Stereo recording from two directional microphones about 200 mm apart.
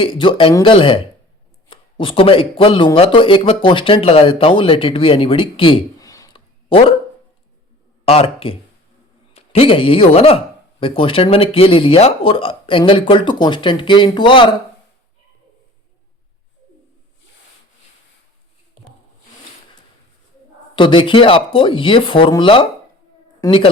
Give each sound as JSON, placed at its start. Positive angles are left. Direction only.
{"t": 0.0, "sound": "speech", "side_deg": 25}
{"t": 8.0, "sound": "speech", "side_deg": 30}
{"t": 20.7, "sound": "a woman's voice", "side_deg": 25}